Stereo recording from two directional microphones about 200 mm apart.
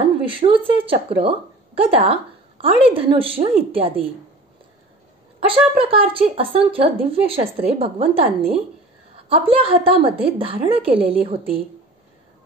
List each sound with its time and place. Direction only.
0.0 s a woman's voice: 25° right (ahead or behind)
5.4 s a woman's voice: 25° right (ahead or behind)